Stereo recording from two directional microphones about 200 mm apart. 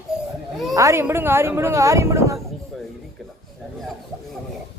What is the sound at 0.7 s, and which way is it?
Speech, 15° right (ahead or behind).